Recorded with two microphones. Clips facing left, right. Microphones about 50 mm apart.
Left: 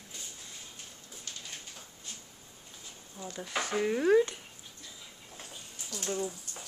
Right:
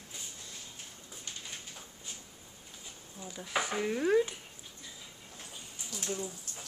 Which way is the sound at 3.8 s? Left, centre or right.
Centre.